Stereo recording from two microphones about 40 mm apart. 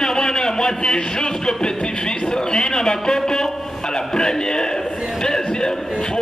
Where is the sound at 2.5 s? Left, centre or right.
Centre.